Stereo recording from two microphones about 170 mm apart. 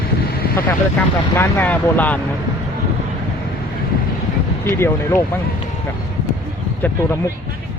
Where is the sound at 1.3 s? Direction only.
10° left (ahead or behind).